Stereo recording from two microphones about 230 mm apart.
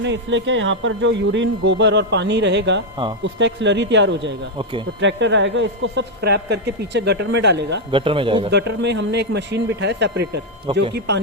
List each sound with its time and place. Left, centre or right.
0.0 s speech: right
7.9 s a man's voice: right
8.4 s speech: right